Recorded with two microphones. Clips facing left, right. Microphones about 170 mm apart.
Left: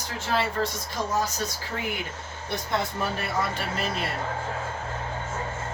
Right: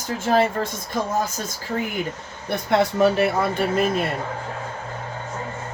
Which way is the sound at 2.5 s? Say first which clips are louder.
Right 9 dB; 75° right (ahead or behind).